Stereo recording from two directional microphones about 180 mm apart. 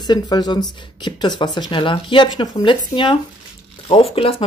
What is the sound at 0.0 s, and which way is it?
Speech, 25° left (ahead or behind).